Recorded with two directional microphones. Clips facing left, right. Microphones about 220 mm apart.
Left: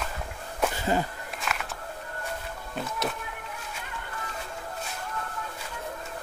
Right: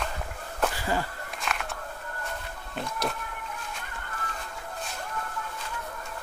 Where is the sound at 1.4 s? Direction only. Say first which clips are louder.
Even; centre (ahead or behind).